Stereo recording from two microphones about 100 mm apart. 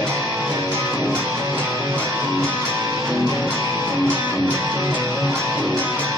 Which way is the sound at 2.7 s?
30° right (ahead or behind).